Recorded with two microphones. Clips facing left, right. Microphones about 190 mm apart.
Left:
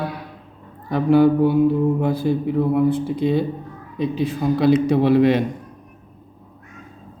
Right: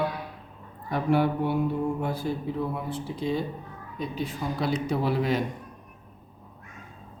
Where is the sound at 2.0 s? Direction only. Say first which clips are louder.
Left 9 dB; 70° left (ahead or behind).